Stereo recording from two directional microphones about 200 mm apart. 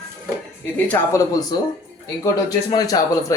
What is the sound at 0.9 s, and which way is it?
Speech, 15° left (ahead or behind).